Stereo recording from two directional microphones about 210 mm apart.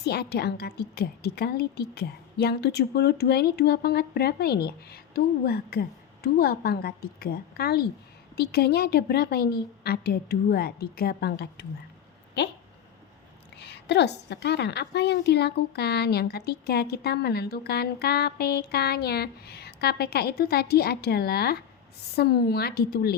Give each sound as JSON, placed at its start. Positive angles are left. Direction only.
{"t": 0.0, "sound": "a woman's voice", "side_deg": 50}
{"t": 13.6, "sound": "a woman's voice", "side_deg": 55}